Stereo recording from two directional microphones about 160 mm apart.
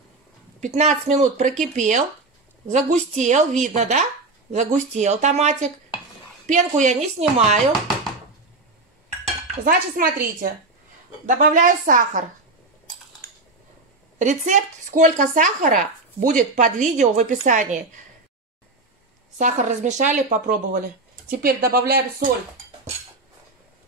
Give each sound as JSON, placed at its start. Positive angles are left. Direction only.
{"t": 0.7, "sound": "speech", "side_deg": -45}
{"t": 9.7, "sound": "speech", "side_deg": -65}
{"t": 14.1, "sound": "speech", "side_deg": -50}
{"t": 19.3, "sound": "speech", "side_deg": -50}